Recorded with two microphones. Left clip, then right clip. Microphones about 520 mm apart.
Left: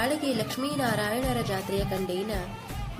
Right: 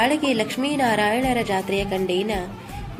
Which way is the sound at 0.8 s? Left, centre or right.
Left.